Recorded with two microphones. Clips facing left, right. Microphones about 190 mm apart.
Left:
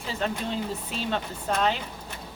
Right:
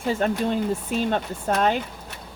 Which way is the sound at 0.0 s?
50° right (ahead or behind).